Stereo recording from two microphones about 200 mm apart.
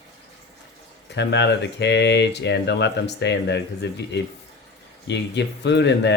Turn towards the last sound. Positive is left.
turn(degrees=60)  # may be behind; listen again after turning